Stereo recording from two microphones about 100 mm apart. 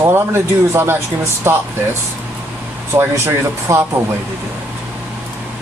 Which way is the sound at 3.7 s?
30° right (ahead or behind).